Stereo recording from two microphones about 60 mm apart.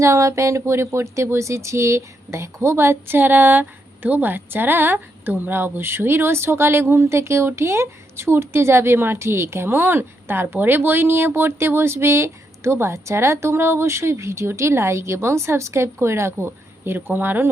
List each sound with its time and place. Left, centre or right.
0.0 s speech: right